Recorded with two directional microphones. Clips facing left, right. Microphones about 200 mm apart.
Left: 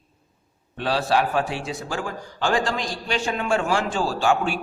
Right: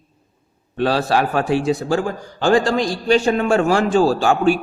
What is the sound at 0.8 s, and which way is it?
A man's voice, 45° right (ahead or behind).